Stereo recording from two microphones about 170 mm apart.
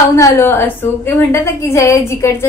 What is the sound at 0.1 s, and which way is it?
A woman's voice, 15° left (ahead or behind).